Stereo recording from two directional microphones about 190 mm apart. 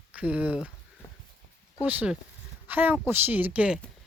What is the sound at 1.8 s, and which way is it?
Speech, 10° right (ahead or behind).